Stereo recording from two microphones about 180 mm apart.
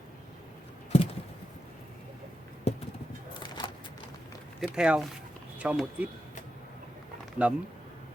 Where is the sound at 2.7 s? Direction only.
35° left (ahead or behind).